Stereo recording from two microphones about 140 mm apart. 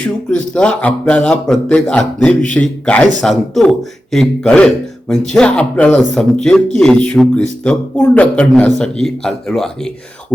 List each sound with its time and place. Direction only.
0.0 s speech: 5° left (ahead or behind)